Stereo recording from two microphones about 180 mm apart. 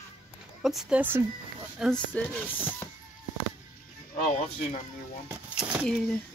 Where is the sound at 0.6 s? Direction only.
5° right (ahead or behind).